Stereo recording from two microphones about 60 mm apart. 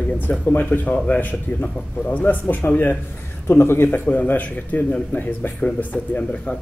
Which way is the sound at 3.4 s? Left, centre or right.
Left.